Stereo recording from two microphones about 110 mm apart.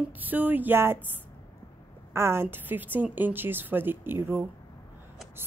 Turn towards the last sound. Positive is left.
turn(degrees=-20)  # may be behind; listen again after turning